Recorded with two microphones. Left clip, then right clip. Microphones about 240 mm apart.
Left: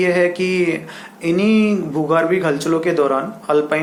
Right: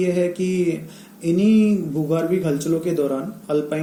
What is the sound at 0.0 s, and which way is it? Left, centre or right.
Speech, left.